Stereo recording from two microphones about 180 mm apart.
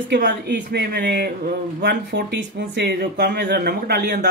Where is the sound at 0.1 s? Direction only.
70° right (ahead or behind).